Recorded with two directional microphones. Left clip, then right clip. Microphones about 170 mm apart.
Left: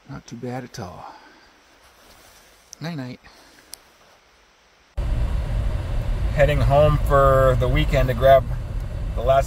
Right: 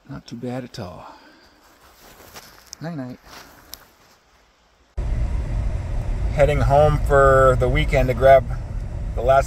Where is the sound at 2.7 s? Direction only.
40° left (ahead or behind).